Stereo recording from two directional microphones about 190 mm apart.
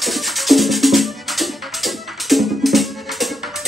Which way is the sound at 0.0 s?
Centre (ahead or behind).